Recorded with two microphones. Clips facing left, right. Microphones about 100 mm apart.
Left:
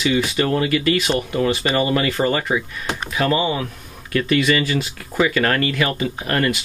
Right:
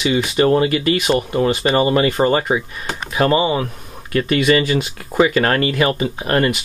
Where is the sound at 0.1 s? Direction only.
30° right (ahead or behind).